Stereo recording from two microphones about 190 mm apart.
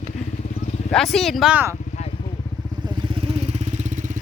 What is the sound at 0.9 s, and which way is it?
Speech, centre (ahead or behind).